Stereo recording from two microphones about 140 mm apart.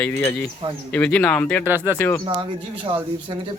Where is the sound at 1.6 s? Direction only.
15° right (ahead or behind).